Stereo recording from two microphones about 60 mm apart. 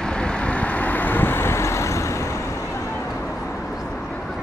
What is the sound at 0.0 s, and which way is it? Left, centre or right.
Vehicle, centre.